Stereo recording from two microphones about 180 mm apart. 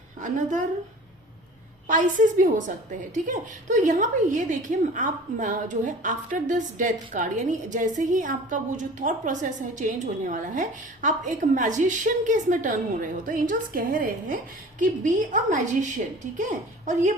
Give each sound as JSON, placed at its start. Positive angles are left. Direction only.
{"t": 0.2, "sound": "a woman's voice", "side_deg": -45}
{"t": 1.9, "sound": "a woman's voice", "side_deg": -45}